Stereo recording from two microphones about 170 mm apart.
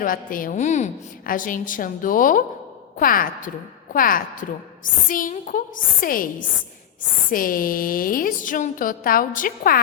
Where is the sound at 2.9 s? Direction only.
55° left (ahead or behind).